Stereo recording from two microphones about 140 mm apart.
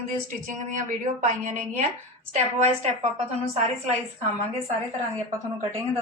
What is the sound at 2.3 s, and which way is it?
Speech, 55° right (ahead or behind).